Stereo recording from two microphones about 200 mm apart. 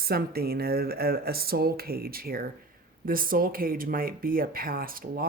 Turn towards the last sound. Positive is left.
turn(degrees=-45)  # may be behind; listen again after turning